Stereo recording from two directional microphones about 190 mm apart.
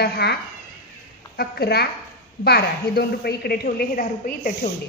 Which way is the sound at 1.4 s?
55° left (ahead or behind).